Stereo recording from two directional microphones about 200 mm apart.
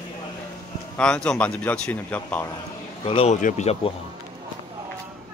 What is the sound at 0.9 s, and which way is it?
A man's voice, 5° left (ahead or behind).